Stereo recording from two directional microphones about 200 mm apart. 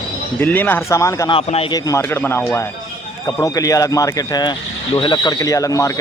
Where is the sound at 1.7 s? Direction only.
20° left (ahead or behind).